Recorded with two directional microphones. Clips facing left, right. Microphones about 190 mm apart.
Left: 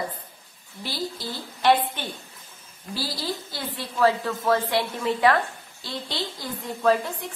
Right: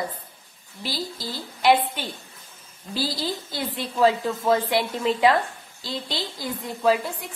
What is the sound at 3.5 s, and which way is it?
A woman's voice, 15° right (ahead or behind).